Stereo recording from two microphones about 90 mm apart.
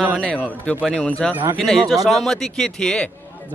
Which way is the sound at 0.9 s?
10° left (ahead or behind).